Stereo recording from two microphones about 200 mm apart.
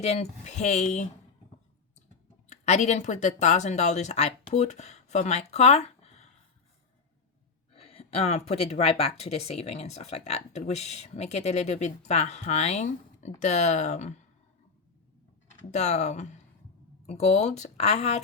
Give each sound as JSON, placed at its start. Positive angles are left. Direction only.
{"t": 0.0, "sound": "speech", "side_deg": 35}
{"t": 2.5, "sound": "speech", "side_deg": 35}
{"t": 7.7, "sound": "speech", "side_deg": 30}
{"t": 15.7, "sound": "speech", "side_deg": 35}